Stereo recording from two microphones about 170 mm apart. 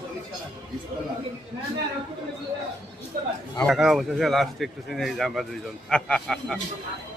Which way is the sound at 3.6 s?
Centre (ahead or behind).